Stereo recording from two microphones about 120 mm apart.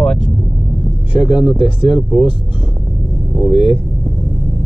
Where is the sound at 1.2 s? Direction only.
40° left (ahead or behind).